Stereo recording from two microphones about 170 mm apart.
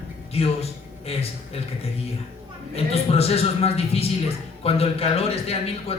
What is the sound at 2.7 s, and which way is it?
A man's voice, 35° left (ahead or behind).